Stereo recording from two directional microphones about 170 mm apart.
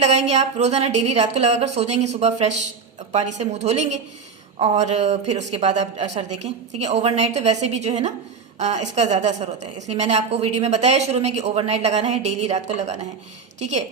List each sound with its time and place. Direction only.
0.0 s a woman's voice: 40° right (ahead or behind)